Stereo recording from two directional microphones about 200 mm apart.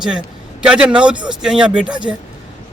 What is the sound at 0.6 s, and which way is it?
Speech, 5° right (ahead or behind).